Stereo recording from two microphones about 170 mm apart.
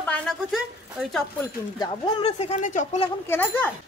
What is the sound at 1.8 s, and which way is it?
Speech, 30° left (ahead or behind).